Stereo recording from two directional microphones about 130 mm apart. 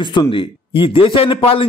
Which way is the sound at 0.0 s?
35° left (ahead or behind).